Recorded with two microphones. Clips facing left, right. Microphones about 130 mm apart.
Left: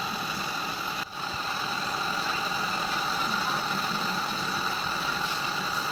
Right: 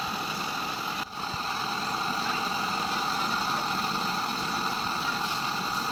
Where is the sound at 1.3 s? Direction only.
30° right (ahead or behind).